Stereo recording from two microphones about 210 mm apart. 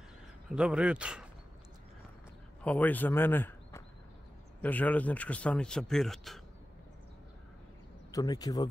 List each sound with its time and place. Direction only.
0.5 s speech: 5° right (ahead or behind)
2.6 s a man's voice: 5° left (ahead or behind)
8.1 s speech: 20° left (ahead or behind)